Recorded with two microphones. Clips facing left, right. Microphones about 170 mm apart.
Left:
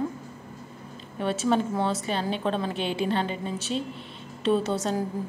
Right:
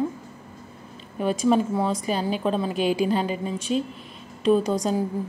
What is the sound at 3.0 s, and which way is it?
A woman's voice, 5° right (ahead or behind).